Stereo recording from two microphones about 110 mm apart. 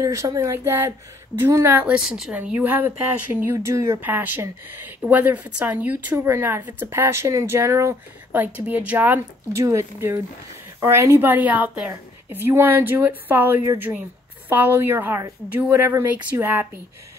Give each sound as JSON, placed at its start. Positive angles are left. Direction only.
{"t": 0.0, "sound": "speech", "side_deg": -30}
{"t": 1.9, "sound": "a woman's voice", "side_deg": -5}
{"t": 2.3, "sound": "speech", "side_deg": -15}